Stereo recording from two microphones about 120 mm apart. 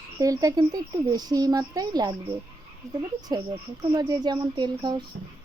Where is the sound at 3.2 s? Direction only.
30° right (ahead or behind).